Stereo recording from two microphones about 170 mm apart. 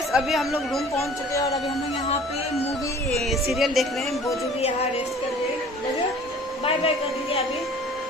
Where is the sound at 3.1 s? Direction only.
Centre (ahead or behind).